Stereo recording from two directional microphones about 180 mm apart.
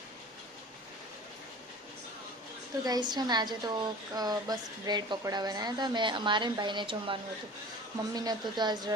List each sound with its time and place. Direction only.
2.8 s speech: 25° right (ahead or behind)